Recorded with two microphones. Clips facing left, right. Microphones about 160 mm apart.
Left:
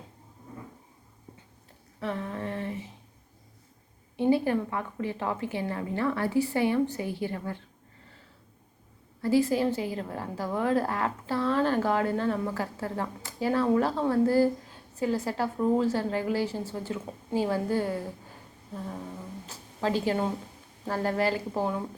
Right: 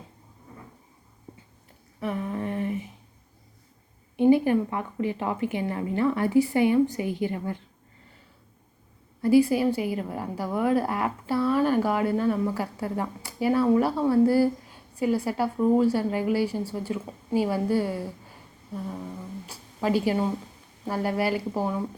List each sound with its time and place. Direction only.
2.0 s a sound: 15° right (ahead or behind)
4.2 s a woman's voice: 15° right (ahead or behind)
9.2 s a woman's voice: 10° right (ahead or behind)
19.5 s a woman's voice: 10° right (ahead or behind)